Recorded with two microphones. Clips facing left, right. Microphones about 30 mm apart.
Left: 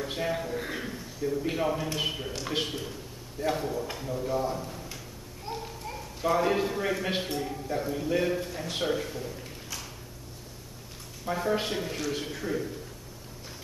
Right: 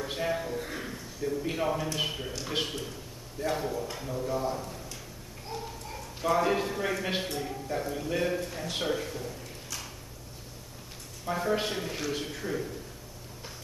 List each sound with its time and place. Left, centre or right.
0.0 s a man's voice: centre
0.6 s a man's voice: left
0.8 s a man's voice: centre
5.5 s clip-clop: centre
6.3 s a man's voice: centre
11.2 s a man's voice: centre